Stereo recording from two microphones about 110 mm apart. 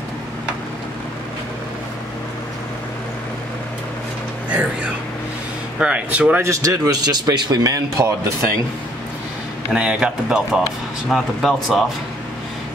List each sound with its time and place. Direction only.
5.8 s speech: 10° right (ahead or behind)
6.4 s speech: 30° right (ahead or behind)
9.7 s speech: 10° right (ahead or behind)